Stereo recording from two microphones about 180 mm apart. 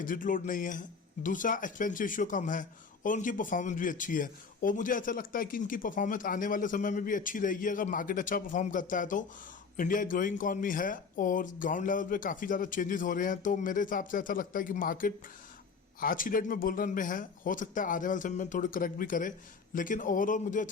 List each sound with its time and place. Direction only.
0.0 s a man's voice: 50° left (ahead or behind)